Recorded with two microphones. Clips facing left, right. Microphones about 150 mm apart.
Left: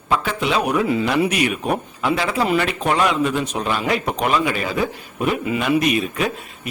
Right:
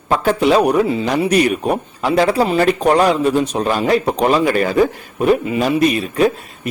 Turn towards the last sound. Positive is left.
turn(degrees=-35)  # may be behind; listen again after turning